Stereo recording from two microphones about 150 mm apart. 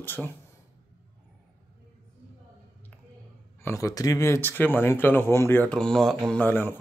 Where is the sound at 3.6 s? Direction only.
20° left (ahead or behind).